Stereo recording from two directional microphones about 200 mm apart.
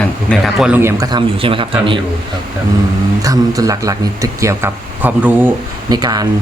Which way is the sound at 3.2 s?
15° right (ahead or behind).